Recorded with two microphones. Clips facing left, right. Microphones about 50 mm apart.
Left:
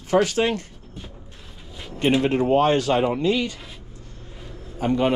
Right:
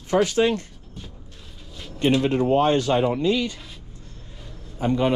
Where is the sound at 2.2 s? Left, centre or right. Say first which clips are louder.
Left 2 dB; left.